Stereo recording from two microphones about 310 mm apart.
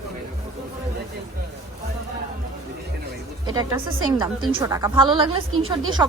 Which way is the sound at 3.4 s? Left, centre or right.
Centre.